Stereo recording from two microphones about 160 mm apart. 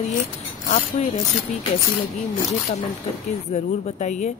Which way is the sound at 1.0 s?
45° left (ahead or behind).